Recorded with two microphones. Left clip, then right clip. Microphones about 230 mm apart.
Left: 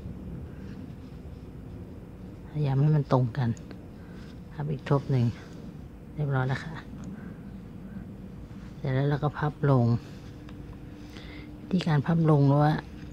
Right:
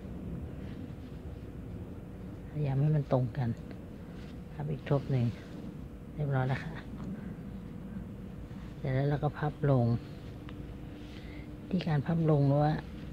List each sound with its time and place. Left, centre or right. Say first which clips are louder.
2.5 s speech: left 5 dB; centre
4.6 s speech: left 4 dB; centre
8.8 s speech: left 4 dB; centre
11.7 s speech: left 6 dB; centre